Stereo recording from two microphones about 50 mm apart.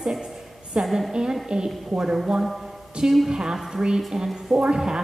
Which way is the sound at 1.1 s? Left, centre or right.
Centre.